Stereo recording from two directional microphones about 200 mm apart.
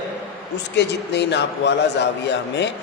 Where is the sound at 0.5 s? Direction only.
60° left (ahead or behind).